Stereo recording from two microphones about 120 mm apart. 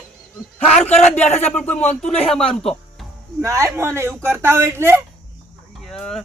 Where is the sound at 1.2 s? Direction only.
65° left (ahead or behind).